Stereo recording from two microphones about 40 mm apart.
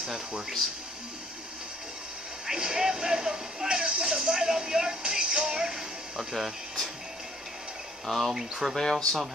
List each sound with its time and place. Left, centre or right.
2.4 s speech: centre
6.3 s speech: centre
8.1 s speech: centre
8.4 s speech: centre
8.7 s speech: centre